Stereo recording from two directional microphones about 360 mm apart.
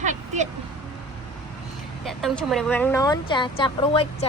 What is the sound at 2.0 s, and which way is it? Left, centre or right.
Speech, centre.